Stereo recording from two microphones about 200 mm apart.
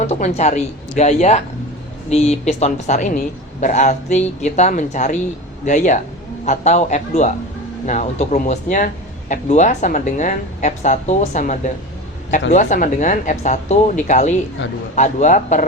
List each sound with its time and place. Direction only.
0.1 s speech: 35° left (ahead or behind)
14.6 s a man's voice: 70° left (ahead or behind)
14.9 s speech: 35° left (ahead or behind)